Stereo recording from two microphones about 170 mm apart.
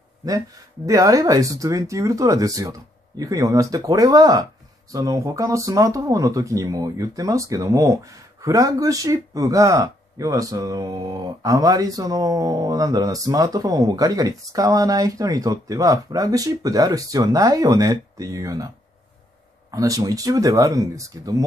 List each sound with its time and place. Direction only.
0.8 s speech: 20° right (ahead or behind)
19.7 s speech: 20° right (ahead or behind)